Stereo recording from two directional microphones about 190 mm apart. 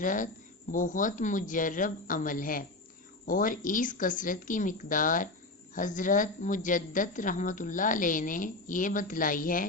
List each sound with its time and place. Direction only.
0.0 s a woman's voice: 45° left (ahead or behind)